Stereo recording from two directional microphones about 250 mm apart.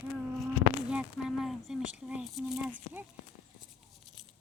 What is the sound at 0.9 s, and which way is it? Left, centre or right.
Speech, centre.